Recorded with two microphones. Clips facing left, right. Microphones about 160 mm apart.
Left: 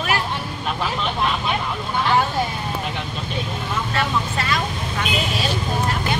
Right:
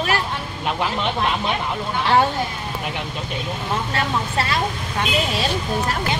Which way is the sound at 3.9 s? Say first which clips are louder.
Left 1 dB; 30° right (ahead or behind).